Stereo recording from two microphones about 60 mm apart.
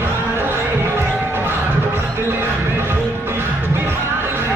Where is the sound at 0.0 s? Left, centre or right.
Right.